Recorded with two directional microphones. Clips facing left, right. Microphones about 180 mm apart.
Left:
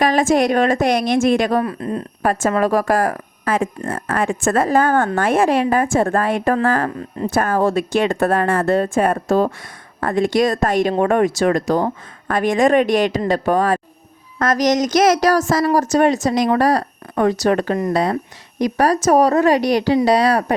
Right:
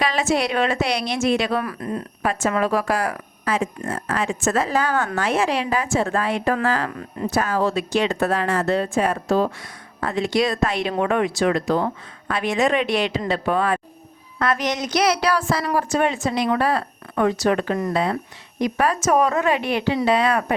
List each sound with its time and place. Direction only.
0.0 s speech: 50° left (ahead or behind)
1.6 s speech: 25° left (ahead or behind)
2.2 s speech: 45° left (ahead or behind)